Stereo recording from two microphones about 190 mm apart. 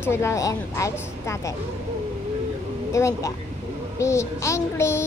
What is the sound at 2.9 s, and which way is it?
A woman's voice, 15° left (ahead or behind).